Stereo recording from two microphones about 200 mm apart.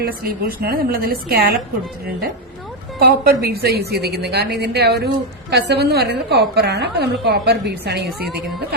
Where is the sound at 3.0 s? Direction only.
50° right (ahead or behind).